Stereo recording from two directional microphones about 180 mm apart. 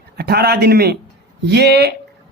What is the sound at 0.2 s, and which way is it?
Speech, 60° right (ahead or behind).